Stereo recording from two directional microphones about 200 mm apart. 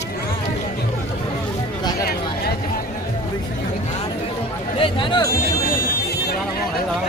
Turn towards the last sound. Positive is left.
turn(degrees=50)  # may be behind; listen again after turning